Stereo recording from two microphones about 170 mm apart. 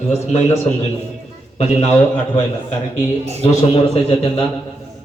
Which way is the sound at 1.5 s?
40° left (ahead or behind).